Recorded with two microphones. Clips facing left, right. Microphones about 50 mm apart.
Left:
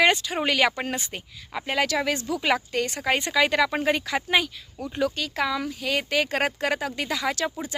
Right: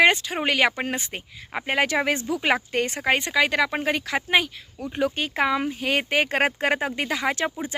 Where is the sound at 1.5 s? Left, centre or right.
Right.